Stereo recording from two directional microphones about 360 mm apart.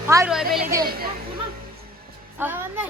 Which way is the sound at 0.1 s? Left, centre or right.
Centre.